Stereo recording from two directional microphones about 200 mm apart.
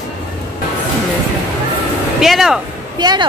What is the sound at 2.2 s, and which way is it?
Speech, centre (ahead or behind).